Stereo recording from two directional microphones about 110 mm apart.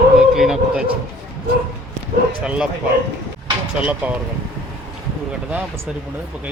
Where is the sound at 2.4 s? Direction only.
10° right (ahead or behind).